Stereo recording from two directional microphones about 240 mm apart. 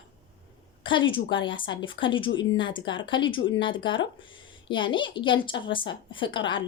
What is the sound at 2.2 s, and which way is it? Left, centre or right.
Speech, left.